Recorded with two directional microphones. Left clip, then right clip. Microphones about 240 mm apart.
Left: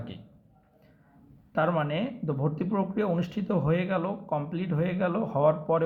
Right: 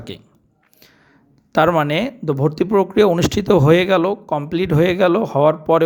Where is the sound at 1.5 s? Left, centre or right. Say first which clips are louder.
Right 12 dB; right.